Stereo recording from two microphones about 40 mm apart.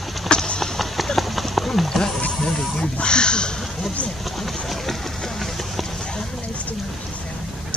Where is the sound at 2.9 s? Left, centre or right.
Left.